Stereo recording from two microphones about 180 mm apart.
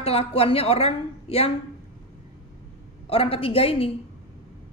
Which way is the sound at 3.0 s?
30° left (ahead or behind).